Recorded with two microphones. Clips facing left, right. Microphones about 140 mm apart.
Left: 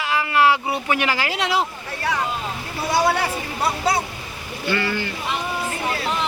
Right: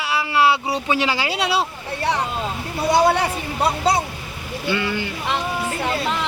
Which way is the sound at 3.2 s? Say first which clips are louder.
Right 2 dB; 20° right (ahead or behind).